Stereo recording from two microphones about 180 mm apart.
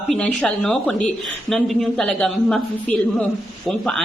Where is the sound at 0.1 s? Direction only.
5° left (ahead or behind).